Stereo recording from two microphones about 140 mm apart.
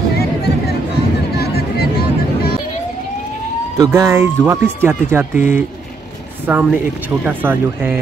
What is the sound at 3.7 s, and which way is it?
Speech, 20° right (ahead or behind).